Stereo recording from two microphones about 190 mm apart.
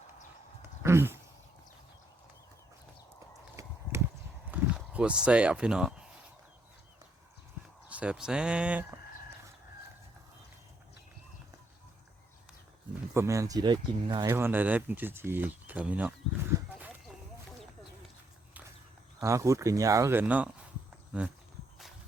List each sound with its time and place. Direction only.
0.8 s a sound: 15° right (ahead or behind)
3.5 s horse: 15° right (ahead or behind)
4.5 s speech: 5° right (ahead or behind)
7.9 s speech: 5° right (ahead or behind)
13.1 s speech: 15° right (ahead or behind)
14.3 s speech: 10° right (ahead or behind)
19.2 s speech: 15° right (ahead or behind)